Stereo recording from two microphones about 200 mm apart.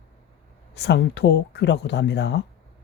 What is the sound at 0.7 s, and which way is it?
Speech, 60° left (ahead or behind).